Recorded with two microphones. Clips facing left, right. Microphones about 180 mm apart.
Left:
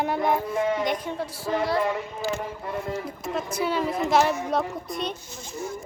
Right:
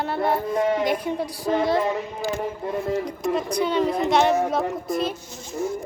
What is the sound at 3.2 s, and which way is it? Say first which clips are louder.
Speech: right 3 dB; 5° left (ahead or behind).